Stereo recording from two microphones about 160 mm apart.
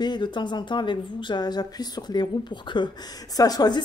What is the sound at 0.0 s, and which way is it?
Speech, 30° left (ahead or behind).